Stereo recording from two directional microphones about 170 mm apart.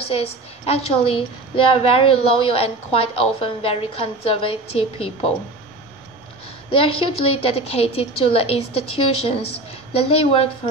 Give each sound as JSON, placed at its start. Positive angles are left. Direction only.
{"t": 0.1, "sound": "a woman's voice", "side_deg": 35}
{"t": 6.7, "sound": "a woman's voice", "side_deg": 35}